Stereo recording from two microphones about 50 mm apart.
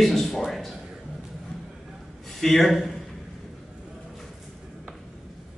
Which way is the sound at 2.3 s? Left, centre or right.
Centre.